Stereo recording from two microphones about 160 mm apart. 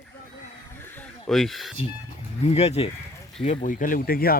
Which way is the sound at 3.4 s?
55° left (ahead or behind).